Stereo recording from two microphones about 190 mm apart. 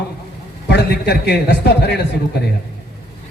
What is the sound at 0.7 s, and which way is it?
A man's voice, 60° left (ahead or behind).